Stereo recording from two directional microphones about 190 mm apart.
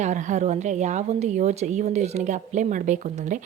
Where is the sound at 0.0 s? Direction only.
40° right (ahead or behind).